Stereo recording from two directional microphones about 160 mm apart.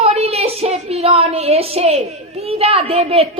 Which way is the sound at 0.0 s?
40° right (ahead or behind).